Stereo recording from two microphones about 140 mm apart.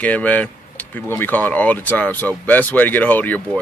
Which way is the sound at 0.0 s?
10° left (ahead or behind).